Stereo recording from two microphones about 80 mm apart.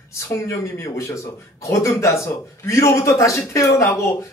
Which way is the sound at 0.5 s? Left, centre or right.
Left.